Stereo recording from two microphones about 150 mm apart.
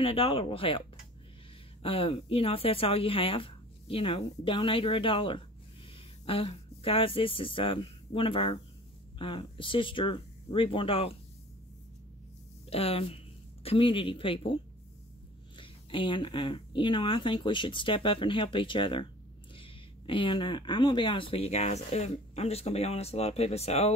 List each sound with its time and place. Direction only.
0.0 s a woman's voice: 40° left (ahead or behind)
12.6 s a woman's voice: 40° left (ahead or behind)